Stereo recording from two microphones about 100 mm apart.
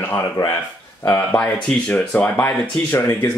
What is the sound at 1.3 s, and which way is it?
Speech, 15° left (ahead or behind).